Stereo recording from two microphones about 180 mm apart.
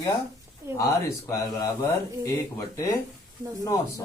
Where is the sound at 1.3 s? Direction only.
15° left (ahead or behind).